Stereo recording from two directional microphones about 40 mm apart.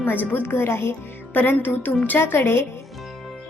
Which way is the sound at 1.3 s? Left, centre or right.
Left.